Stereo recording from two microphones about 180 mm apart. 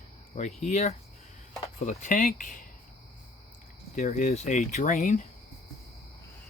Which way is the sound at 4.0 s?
45° left (ahead or behind).